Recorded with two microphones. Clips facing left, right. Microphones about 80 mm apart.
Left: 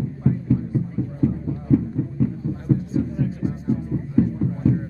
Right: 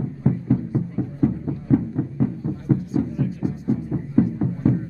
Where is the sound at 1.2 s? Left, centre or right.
Right.